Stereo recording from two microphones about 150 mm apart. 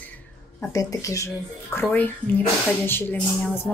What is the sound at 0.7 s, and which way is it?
Speech, 20° left (ahead or behind).